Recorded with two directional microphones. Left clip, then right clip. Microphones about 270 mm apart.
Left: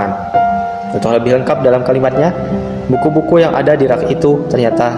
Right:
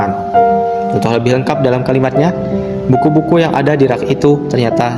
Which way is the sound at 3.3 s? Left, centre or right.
Right.